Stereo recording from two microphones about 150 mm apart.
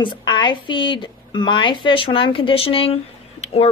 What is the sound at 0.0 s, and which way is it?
A woman's voice, 30° left (ahead or behind).